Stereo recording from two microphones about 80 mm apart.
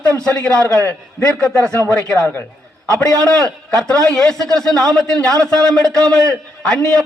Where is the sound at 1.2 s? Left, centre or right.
Centre.